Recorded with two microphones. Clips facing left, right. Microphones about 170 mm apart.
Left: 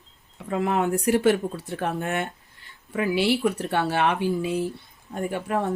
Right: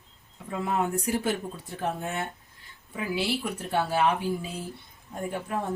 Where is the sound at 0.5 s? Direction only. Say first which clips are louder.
Left 5 dB; 70° left (ahead or behind).